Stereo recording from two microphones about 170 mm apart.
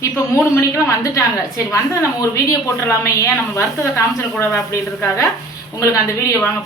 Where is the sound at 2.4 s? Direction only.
20° left (ahead or behind).